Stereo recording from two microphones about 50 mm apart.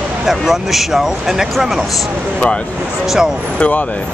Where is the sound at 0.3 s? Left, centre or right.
Centre.